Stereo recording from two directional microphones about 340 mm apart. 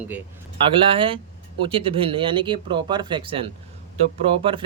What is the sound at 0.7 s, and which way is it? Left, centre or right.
Speech, centre.